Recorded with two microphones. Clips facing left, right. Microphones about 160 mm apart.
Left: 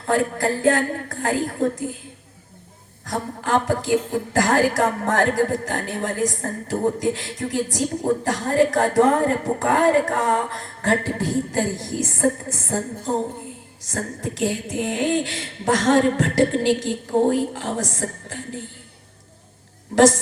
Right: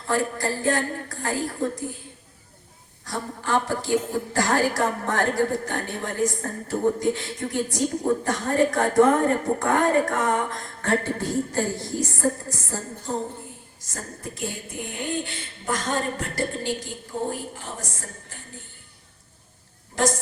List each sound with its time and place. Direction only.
0.0 s music: 55° left (ahead or behind)
0.7 s a woman's voice: 50° left (ahead or behind)
3.1 s a woman's voice: 45° left (ahead or behind)
13.9 s speech: 90° left
19.9 s speech: 90° left